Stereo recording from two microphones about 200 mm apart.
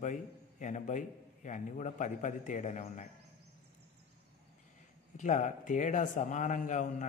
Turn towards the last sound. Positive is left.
turn(degrees=40)  # may be behind; listen again after turning